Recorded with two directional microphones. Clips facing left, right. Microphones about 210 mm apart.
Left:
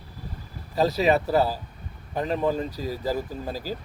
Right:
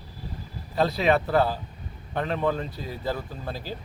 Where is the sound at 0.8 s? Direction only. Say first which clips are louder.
Left 1 dB; 40° left (ahead or behind).